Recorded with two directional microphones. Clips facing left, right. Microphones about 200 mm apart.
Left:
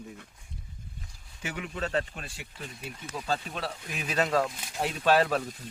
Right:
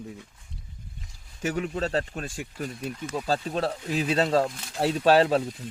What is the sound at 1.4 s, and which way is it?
Speech, 40° right (ahead or behind).